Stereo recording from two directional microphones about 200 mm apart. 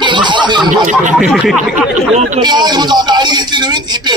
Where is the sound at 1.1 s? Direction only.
Centre (ahead or behind).